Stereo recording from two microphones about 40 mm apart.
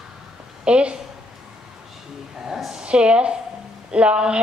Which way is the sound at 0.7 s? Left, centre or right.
Right.